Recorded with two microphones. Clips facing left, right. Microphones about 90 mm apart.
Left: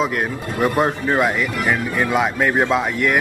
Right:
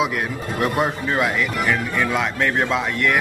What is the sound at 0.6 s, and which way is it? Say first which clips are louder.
Speech: left 3 dB; centre (ahead or behind).